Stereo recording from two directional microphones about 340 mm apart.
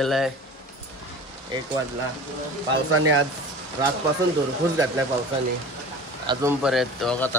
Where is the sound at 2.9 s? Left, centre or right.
Right.